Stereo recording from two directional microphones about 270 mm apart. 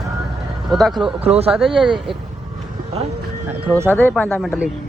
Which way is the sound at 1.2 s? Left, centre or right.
Right.